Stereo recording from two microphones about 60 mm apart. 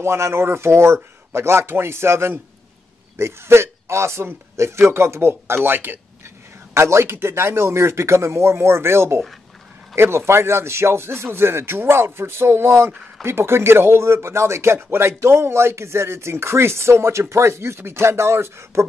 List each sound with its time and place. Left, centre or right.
0.0 s speech: right
6.7 s speech: right